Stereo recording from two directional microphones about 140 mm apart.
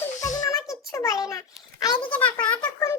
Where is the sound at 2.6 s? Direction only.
20° left (ahead or behind).